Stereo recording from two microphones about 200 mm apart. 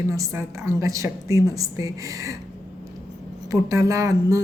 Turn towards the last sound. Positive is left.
turn(degrees=-15)  # may be behind; listen again after turning